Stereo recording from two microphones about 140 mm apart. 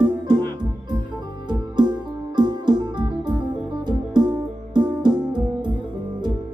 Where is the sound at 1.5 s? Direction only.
30° right (ahead or behind).